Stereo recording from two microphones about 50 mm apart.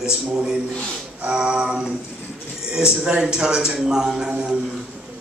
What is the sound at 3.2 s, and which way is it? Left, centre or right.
Speech, centre.